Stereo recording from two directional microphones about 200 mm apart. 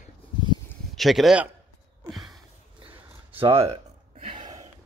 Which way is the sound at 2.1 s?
Centre (ahead or behind).